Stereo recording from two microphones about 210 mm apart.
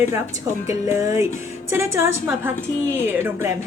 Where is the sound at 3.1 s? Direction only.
10° right (ahead or behind).